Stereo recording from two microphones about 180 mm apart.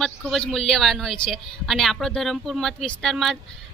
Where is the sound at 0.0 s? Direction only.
Centre (ahead or behind).